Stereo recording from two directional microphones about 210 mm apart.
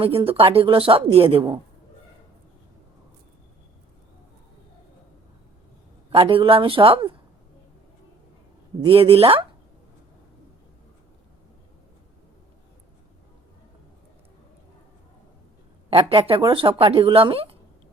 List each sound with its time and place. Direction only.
0.0 s speech: 25° right (ahead or behind)
6.1 s speech: 25° right (ahead or behind)
8.8 s speech: 25° right (ahead or behind)
15.9 s speech: 25° right (ahead or behind)